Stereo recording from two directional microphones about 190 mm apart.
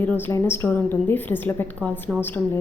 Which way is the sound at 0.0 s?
10° left (ahead or behind).